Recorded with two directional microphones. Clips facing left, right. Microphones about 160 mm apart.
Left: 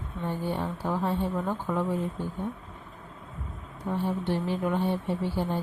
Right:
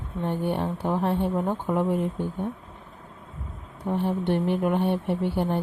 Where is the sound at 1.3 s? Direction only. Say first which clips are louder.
Right 4 dB; 30° right (ahead or behind).